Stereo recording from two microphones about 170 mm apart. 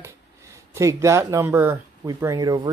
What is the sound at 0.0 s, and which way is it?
Speech, 15° right (ahead or behind).